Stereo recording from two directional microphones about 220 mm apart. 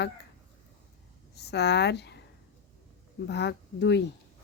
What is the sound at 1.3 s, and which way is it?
Speech, 50° left (ahead or behind).